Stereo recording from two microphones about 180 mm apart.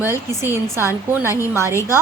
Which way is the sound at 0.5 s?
15° right (ahead or behind).